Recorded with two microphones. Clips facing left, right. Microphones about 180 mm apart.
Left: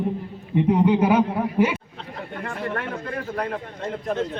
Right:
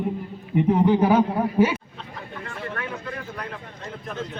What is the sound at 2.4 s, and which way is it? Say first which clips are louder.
Speech: left 4 dB; 65° left (ahead or behind).